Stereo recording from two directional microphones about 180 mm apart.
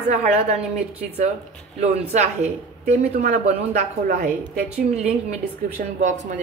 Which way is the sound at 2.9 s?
40° right (ahead or behind).